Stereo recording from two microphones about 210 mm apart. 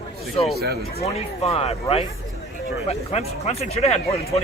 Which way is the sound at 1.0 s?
30° left (ahead or behind).